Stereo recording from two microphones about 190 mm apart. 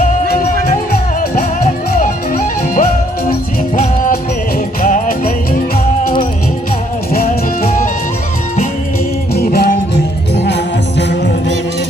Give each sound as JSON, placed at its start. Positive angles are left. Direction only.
{"t": 1.6, "sound": "music", "side_deg": 45}
{"t": 4.8, "sound": "music", "side_deg": 50}
{"t": 7.1, "sound": "music", "side_deg": 50}
{"t": 9.3, "sound": "music", "side_deg": 55}
{"t": 11.1, "sound": "music", "side_deg": 60}